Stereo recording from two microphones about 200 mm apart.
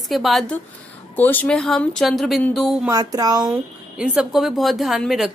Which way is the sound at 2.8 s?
20° right (ahead or behind).